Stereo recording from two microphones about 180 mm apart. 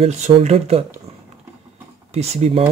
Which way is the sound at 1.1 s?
30° right (ahead or behind).